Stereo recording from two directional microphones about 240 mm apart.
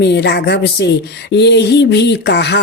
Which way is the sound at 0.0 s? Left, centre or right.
Left.